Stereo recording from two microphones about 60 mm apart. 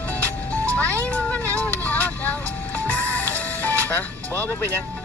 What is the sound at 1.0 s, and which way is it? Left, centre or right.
Speech, left.